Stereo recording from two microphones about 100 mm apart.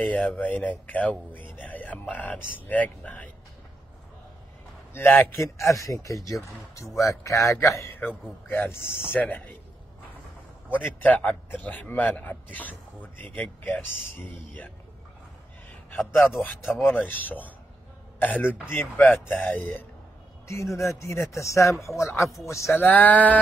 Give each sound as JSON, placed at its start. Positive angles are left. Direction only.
{"t": 0.0, "sound": "a man's voice", "side_deg": 15}
{"t": 4.9, "sound": "a man's voice", "side_deg": 25}
{"t": 10.8, "sound": "a man's voice", "side_deg": 15}
{"t": 16.2, "sound": "a man's voice", "side_deg": 30}
{"t": 16.8, "sound": "a man's voice", "side_deg": 15}
{"t": 20.4, "sound": "a man's voice", "side_deg": 30}
{"t": 22.8, "sound": "a man's voice", "side_deg": 20}